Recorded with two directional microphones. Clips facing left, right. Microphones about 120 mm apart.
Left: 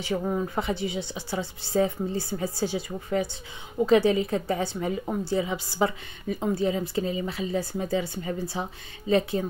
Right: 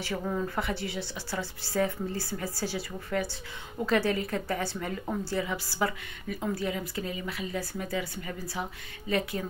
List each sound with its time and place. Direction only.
0.0 s a woman's voice: 20° left (ahead or behind)